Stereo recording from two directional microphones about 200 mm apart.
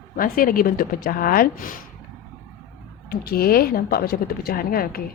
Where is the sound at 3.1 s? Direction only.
50° left (ahead or behind).